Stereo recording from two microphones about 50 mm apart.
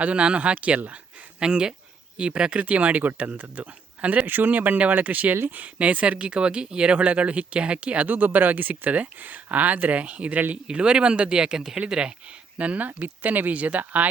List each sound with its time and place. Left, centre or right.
0.0 s speech: right
10.5 s speech: right
12.5 s speech: right